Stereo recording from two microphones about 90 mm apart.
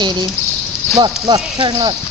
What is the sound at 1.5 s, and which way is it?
Speech, 55° right (ahead or behind).